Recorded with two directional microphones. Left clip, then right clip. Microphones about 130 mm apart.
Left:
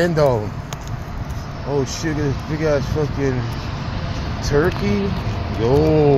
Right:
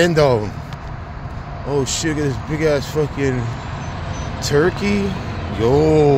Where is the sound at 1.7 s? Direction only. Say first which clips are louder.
Right 2 dB; 45° right (ahead or behind).